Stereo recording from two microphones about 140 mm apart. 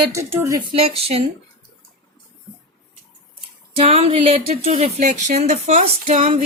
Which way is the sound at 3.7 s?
45° right (ahead or behind).